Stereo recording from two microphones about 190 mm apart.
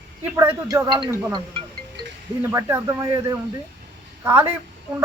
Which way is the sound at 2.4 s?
15° right (ahead or behind).